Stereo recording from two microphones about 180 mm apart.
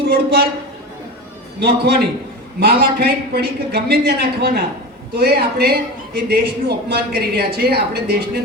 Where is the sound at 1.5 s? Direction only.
65° right (ahead or behind).